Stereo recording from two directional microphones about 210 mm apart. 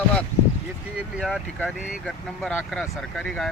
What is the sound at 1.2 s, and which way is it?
A man's voice, centre (ahead or behind).